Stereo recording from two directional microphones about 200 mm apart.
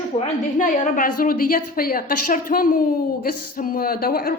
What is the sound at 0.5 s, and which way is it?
A man's voice, 40° left (ahead or behind).